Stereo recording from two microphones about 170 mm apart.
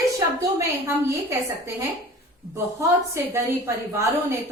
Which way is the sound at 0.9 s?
15° right (ahead or behind).